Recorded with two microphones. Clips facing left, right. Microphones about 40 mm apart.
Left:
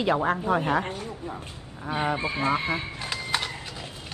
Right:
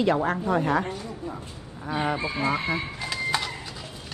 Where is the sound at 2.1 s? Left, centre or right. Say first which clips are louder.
Left 1 dB; left.